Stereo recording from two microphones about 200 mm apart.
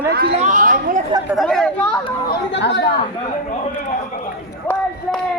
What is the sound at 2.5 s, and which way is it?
Speech, 60° left (ahead or behind).